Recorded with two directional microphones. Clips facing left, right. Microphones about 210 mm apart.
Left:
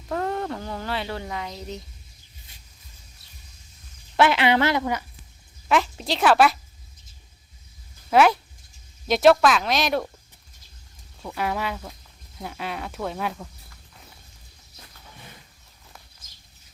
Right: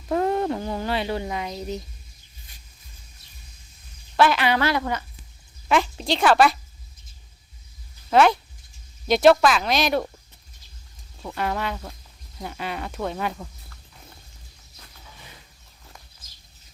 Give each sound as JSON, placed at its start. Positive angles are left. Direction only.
{"t": 0.1, "sound": "speech", "side_deg": -15}
{"t": 4.2, "sound": "a woman's voice", "side_deg": 25}
{"t": 5.6, "sound": "a woman's voice", "side_deg": 0}
{"t": 8.1, "sound": "speech", "side_deg": 5}
{"t": 11.2, "sound": "speech", "side_deg": 5}